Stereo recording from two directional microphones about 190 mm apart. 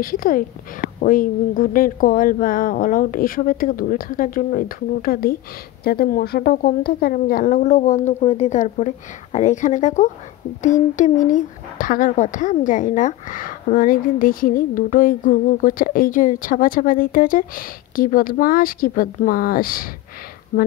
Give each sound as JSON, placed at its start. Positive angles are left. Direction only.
{"t": 0.0, "sound": "speech", "side_deg": 50}